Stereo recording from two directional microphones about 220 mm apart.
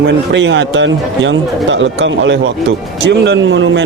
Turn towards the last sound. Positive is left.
turn(degrees=-60)  # may be behind; listen again after turning